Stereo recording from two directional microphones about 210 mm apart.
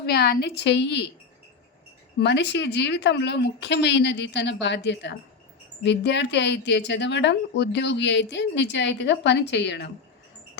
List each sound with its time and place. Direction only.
0.0 s a woman's voice: 50° left (ahead or behind)
2.1 s a woman's voice: 55° left (ahead or behind)